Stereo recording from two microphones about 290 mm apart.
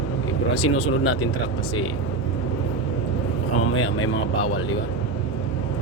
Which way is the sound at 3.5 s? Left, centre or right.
Left.